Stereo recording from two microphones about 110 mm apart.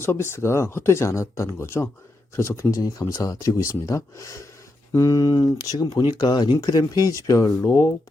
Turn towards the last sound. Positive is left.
turn(degrees=30)  # may be behind; listen again after turning